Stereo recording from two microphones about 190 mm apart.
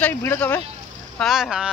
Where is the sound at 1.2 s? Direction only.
Centre (ahead or behind).